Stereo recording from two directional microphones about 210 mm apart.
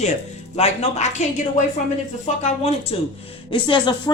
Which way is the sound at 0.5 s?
30° left (ahead or behind).